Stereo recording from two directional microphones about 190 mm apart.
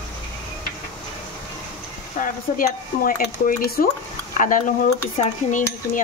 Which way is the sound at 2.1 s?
45° left (ahead or behind).